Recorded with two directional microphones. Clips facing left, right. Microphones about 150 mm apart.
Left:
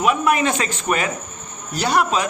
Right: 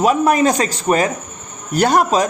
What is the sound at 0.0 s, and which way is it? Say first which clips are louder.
A man's voice: right 4 dB; 35° right (ahead or behind).